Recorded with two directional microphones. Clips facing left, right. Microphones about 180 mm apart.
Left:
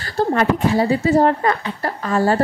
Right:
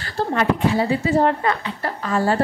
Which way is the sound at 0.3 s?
40° left (ahead or behind).